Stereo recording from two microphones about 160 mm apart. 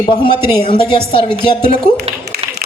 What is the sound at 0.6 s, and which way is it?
Speech, 30° left (ahead or behind).